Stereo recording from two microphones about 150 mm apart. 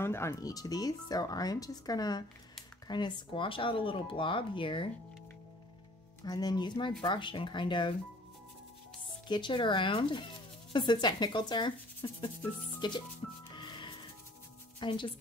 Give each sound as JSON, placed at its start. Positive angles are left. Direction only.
{"t": 0.0, "sound": "speech", "side_deg": 15}
{"t": 6.2, "sound": "speech", "side_deg": 25}
{"t": 9.3, "sound": "speech", "side_deg": 30}
{"t": 13.6, "sound": "music", "side_deg": 30}
{"t": 14.8, "sound": "speech", "side_deg": 35}